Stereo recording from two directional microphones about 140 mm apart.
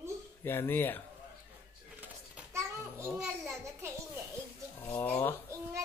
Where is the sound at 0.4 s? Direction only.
15° left (ahead or behind).